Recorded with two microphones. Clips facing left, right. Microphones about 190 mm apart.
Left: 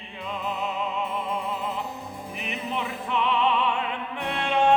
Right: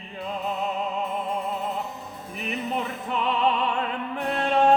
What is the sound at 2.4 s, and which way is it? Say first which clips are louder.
Music: right 3 dB; 40° right (ahead or behind).